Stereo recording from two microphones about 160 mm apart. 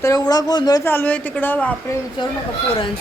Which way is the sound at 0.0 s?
25° left (ahead or behind).